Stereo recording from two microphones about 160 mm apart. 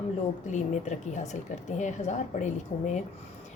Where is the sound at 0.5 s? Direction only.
45° left (ahead or behind).